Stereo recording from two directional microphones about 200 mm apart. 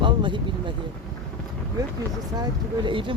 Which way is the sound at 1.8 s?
20° right (ahead or behind).